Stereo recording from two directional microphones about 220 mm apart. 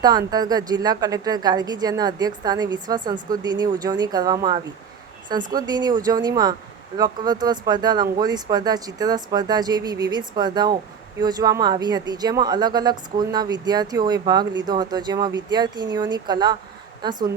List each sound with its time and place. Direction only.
0.0 s a woman's voice: 15° right (ahead or behind)